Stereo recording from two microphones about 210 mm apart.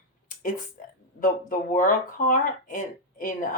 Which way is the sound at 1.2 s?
40° left (ahead or behind).